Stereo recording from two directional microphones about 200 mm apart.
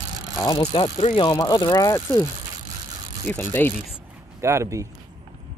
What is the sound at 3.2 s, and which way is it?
Speech, 10° left (ahead or behind).